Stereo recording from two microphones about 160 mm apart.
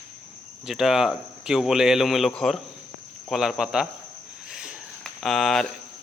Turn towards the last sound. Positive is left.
turn(degrees=0)  # may be behind; listen again after turning